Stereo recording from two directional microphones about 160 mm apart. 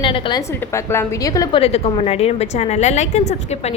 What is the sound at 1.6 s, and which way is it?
A woman's voice, 40° left (ahead or behind).